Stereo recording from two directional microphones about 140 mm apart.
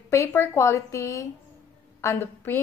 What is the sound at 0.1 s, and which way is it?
A woman's voice, 20° left (ahead or behind).